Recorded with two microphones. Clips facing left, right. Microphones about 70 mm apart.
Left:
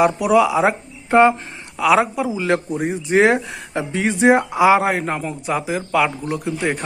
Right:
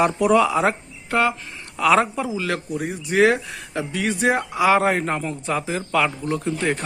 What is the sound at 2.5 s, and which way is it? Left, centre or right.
Speech, left.